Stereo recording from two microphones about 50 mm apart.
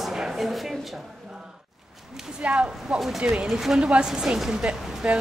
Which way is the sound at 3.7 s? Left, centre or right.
Centre.